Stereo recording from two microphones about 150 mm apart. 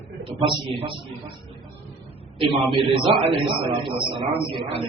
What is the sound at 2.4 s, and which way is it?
A man's voice, 35° right (ahead or behind).